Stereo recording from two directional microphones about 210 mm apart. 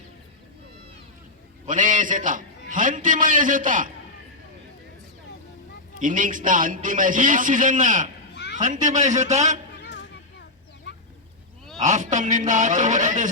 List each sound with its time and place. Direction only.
1.6 s a man's voice: 40° right (ahead or behind)
6.0 s a man's voice: 40° right (ahead or behind)
8.3 s a sound: 55° left (ahead or behind)
8.5 s a man's voice: 35° right (ahead or behind)
9.8 s chop: 55° left (ahead or behind)
10.9 s duck: 55° left (ahead or behind)
11.8 s a man's voice: 35° right (ahead or behind)